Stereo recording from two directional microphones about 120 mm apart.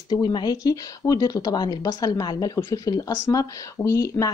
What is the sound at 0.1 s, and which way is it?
Speech, 35° left (ahead or behind).